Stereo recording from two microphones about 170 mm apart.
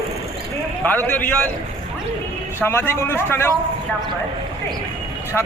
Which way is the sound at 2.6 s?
15° left (ahead or behind).